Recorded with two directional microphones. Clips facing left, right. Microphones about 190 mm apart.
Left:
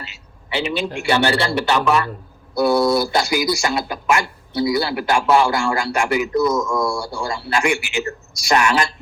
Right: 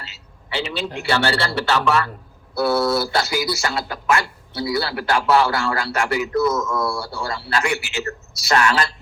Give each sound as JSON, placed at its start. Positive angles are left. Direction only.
{"t": 0.0, "sound": "a man's voice", "side_deg": 15}